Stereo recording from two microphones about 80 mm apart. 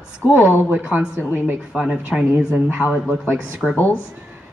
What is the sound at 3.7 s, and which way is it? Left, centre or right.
Speech, left.